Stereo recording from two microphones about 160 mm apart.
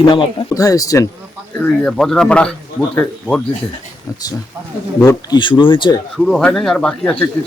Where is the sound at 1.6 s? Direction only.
5° left (ahead or behind).